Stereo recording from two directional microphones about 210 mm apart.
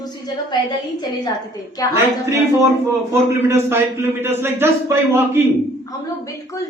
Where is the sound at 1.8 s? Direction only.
15° left (ahead or behind).